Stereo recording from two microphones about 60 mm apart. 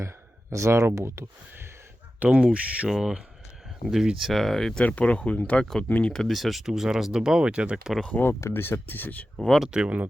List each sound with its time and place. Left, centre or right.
0.5 s speech: right
2.1 s speech: right; by 4.8 s centre
4.8 s speech: left
6.1 s speech: centre
8.1 s speech: left
9.4 s speech: centre
9.6 s speech: centre